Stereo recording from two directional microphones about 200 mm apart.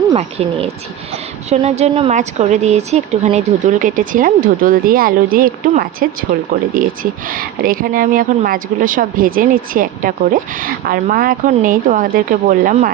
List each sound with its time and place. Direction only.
0.2 s a woman's voice: 30° right (ahead or behind)